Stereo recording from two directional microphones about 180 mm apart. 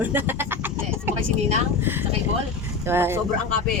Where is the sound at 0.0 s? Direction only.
10° right (ahead or behind).